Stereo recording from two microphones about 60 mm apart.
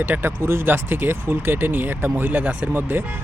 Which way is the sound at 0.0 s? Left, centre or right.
Right.